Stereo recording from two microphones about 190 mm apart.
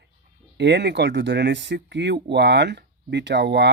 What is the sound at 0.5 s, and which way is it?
Speech, 65° right (ahead or behind).